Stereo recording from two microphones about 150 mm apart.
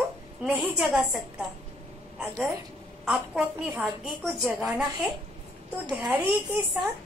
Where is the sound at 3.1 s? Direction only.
10° right (ahead or behind).